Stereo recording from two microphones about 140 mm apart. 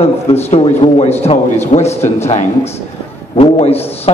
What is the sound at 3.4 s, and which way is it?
Speech, 45° left (ahead or behind).